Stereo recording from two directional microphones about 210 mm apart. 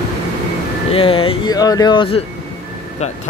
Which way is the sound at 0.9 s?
25° left (ahead or behind).